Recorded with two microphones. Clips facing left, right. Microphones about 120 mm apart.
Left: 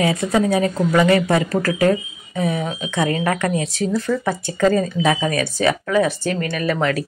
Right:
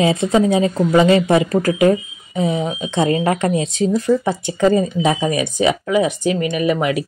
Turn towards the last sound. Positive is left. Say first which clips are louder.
# right 3 dB
turn(degrees=-15)  # may be behind; listen again after turning